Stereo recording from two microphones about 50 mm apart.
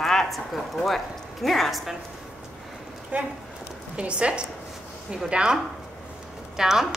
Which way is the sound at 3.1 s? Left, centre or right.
Right.